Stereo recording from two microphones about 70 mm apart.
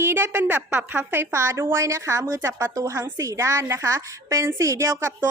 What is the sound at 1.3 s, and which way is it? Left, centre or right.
A woman's voice, right.